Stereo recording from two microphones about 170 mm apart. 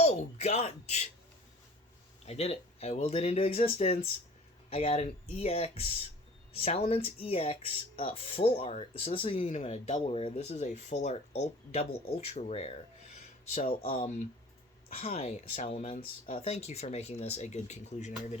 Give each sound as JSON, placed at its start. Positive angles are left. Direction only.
{"t": 0.0, "sound": "speech", "side_deg": 40}
{"t": 2.2, "sound": "speech", "side_deg": 40}
{"t": 14.8, "sound": "speech", "side_deg": 35}